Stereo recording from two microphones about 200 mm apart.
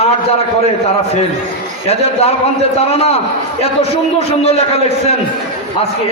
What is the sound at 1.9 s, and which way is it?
A man's voice, 30° left (ahead or behind).